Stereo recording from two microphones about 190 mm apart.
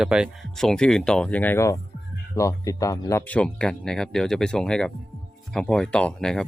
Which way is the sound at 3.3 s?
5° left (ahead or behind).